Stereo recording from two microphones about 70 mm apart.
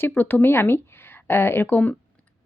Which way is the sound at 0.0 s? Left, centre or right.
Left.